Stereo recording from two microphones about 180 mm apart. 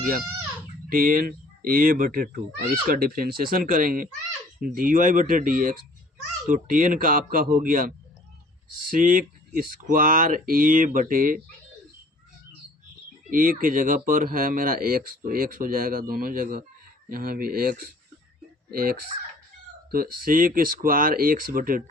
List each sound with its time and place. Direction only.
0.9 s speech: 55° right (ahead or behind)
13.3 s speech: 50° right (ahead or behind)